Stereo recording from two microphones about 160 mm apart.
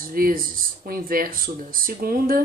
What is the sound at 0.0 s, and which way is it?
Speech, 60° right (ahead or behind).